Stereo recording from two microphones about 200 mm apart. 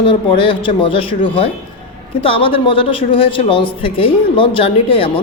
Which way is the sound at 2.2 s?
25° left (ahead or behind).